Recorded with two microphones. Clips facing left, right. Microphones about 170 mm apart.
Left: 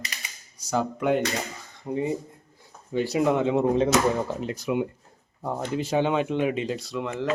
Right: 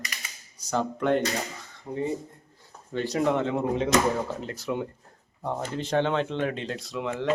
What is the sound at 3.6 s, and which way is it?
Speech, 30° left (ahead or behind).